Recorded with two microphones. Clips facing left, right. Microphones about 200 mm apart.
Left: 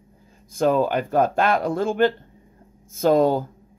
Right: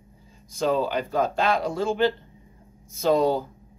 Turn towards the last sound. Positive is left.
turn(degrees=50)  # may be behind; listen again after turning